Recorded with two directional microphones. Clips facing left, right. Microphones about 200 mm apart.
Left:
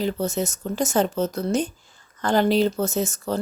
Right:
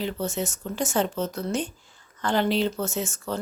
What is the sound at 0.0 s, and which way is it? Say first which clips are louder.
A woman's voice: left 4 dB; 40° left (ahead or behind).